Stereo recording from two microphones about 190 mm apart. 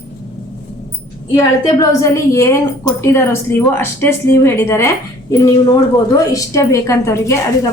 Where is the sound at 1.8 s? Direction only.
15° left (ahead or behind).